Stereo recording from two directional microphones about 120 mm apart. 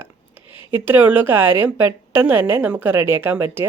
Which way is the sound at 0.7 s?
15° right (ahead or behind).